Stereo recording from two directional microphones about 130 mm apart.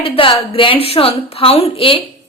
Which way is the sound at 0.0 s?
45° left (ahead or behind).